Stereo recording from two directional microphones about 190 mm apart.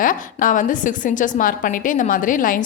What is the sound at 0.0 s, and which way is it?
A woman's voice, 45° left (ahead or behind).